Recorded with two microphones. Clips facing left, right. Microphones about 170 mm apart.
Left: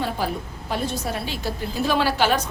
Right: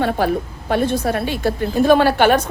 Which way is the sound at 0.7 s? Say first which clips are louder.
Right 8 dB; 60° right (ahead or behind).